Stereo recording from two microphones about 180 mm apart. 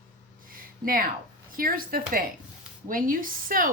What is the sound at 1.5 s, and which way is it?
Speech, 55° right (ahead or behind).